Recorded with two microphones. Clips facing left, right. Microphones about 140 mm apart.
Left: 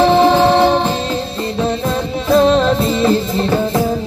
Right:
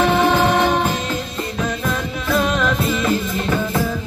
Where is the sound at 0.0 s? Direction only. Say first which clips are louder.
Left 5 dB; 30° left (ahead or behind).